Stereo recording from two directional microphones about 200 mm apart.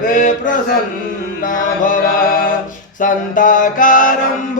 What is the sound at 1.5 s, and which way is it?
Mantra, 40° left (ahead or behind).